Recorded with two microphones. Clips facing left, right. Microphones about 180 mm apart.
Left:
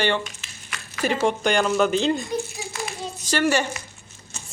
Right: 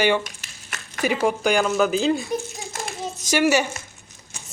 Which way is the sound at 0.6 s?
45° right (ahead or behind).